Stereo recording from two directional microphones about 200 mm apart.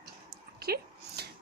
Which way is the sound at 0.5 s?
50° right (ahead or behind).